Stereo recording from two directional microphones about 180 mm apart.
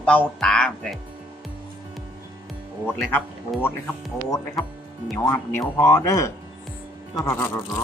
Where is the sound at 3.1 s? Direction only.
10° left (ahead or behind).